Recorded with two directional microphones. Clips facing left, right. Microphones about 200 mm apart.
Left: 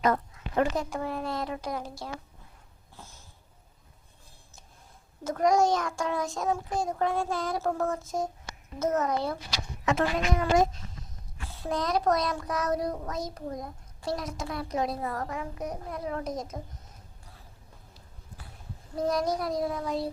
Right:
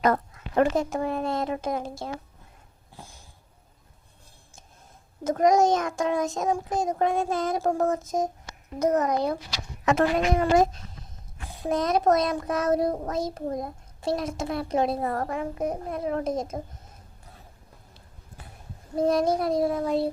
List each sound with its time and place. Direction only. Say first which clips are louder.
0.0 s a sound: right 3 dB; 55° right (ahead or behind)
0.8 s a child's voice: right 5 dB; 25° right (ahead or behind)
2.9 s a sound: right 3 dB; 15° right (ahead or behind)
5.2 s a child's voice: right 4 dB; 20° right (ahead or behind)
9.8 s speech: right 5 dB; 55° right (ahead or behind)
11.3 s a child's voice: right 5 dB; 15° right (ahead or behind)
15.0 s a child's voice: right 5 dB; 50° right (ahead or behind)
15.6 s a child's voice: right 7 dB; 25° right (ahead or behind)
18.9 s a child's voice: right 5 dB; 25° right (ahead or behind)